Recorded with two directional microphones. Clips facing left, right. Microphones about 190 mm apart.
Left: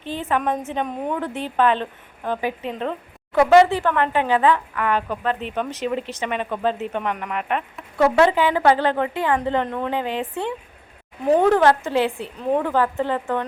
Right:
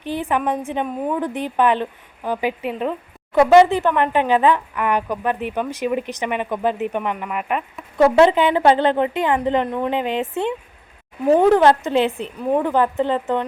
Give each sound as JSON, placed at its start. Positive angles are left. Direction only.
{"t": 0.0, "sound": "a woman's voice", "side_deg": -15}
{"t": 7.9, "sound": "a woman's voice", "side_deg": -20}